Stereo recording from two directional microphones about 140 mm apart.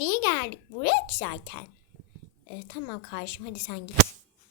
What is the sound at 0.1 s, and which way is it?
A child's voice, 25° left (ahead or behind).